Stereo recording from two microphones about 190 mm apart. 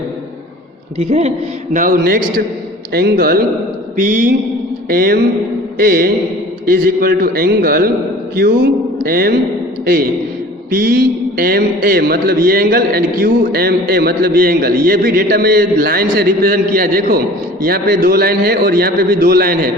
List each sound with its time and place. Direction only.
0.9 s a woman's voice: 35° right (ahead or behind)
1.7 s a man's voice: 45° right (ahead or behind)
4.0 s a man's voice: 45° right (ahead or behind)